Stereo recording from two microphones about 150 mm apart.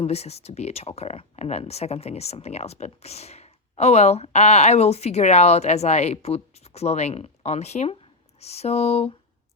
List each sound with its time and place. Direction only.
0.0 s speech: 45° left (ahead or behind)